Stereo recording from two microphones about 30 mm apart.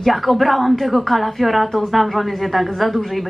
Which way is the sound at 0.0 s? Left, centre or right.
Centre.